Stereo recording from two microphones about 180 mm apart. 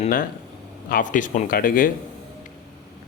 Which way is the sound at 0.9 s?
50° left (ahead or behind).